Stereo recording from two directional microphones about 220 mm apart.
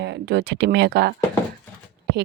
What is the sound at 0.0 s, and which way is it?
Speech, 50° right (ahead or behind).